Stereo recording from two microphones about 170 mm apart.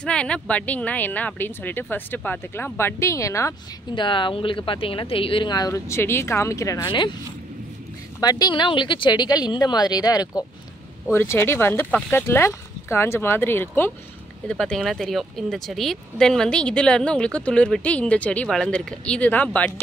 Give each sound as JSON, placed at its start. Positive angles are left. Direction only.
{"t": 0.0, "sound": "speech", "side_deg": 5}
{"t": 8.2, "sound": "speech", "side_deg": 25}